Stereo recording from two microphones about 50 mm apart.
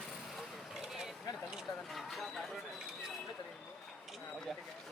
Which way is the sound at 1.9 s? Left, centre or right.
Centre.